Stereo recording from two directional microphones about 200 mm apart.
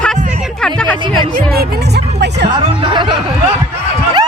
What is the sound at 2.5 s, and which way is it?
Speech, 25° right (ahead or behind).